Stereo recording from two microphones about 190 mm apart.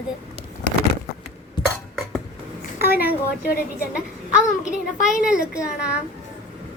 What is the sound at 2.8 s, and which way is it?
A woman's voice, 55° left (ahead or behind).